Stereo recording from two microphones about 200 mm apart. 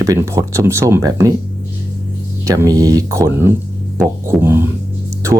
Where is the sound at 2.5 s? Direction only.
15° right (ahead or behind).